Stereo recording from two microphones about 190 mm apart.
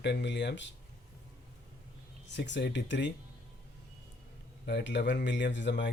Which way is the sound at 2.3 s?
65° left (ahead or behind).